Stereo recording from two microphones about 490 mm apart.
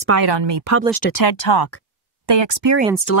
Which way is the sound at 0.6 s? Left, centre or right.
Right.